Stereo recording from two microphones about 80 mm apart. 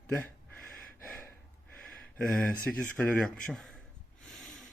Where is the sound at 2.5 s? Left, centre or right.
Centre.